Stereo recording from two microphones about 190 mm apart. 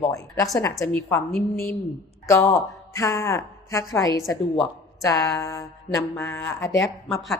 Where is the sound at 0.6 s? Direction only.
15° left (ahead or behind).